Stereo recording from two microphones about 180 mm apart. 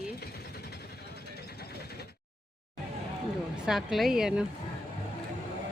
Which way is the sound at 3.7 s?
Centre (ahead or behind).